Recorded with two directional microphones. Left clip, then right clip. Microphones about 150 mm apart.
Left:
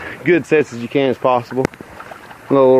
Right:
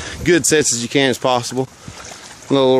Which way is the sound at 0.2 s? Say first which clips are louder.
Even; 35° right (ahead or behind).